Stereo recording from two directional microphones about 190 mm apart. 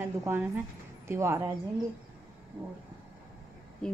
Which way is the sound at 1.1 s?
15° right (ahead or behind).